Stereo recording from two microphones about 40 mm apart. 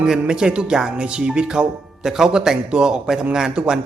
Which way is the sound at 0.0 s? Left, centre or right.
Centre.